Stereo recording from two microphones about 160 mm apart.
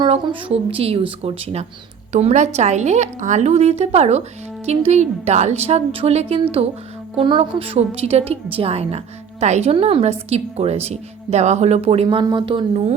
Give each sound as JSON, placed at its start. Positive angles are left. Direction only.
{"t": 0.0, "sound": "speech", "side_deg": -30}
{"t": 2.1, "sound": "a woman's voice", "side_deg": -45}